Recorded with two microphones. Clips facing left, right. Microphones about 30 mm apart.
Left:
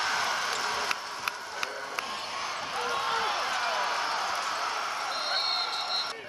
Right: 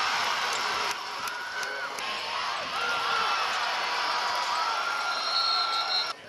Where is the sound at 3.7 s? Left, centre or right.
Right.